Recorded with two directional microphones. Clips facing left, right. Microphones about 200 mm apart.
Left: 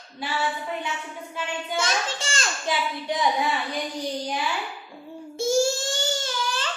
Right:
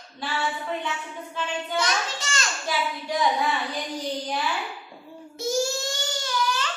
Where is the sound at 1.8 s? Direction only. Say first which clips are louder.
Left 1 dB; 30° left (ahead or behind).